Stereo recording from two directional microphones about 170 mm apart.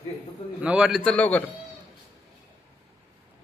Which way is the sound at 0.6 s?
5° right (ahead or behind).